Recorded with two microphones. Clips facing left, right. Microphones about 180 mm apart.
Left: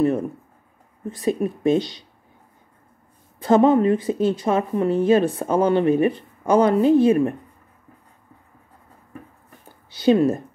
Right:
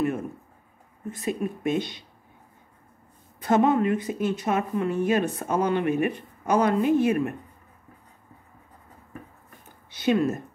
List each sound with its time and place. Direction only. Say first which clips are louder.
1.2 s a woman's voice: left 7 dB; 30° left (ahead or behind)
3.3 s a woman's voice: left 5 dB; 30° left (ahead or behind)
9.9 s a woman's voice: left 6 dB; 30° left (ahead or behind)